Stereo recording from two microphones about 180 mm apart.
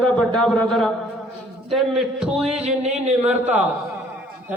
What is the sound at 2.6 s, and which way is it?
Speech, 35° right (ahead or behind).